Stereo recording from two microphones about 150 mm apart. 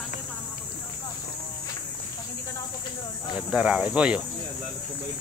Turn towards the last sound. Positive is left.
turn(degrees=-5)  # may be behind; listen again after turning